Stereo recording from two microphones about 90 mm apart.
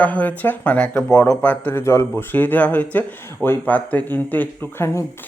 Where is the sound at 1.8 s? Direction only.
30° left (ahead or behind).